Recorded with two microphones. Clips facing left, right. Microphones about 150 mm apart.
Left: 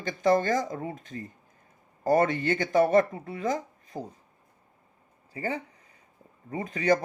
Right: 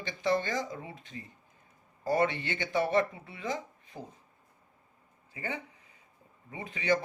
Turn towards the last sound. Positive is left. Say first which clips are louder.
# left 5 dB
turn(degrees=45)  # may be behind; listen again after turning